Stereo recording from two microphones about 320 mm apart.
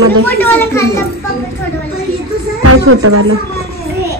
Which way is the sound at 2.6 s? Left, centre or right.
Right.